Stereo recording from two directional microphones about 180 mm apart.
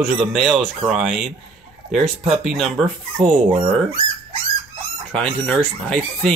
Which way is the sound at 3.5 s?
30° right (ahead or behind).